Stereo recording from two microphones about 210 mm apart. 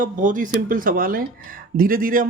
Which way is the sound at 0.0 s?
40° right (ahead or behind).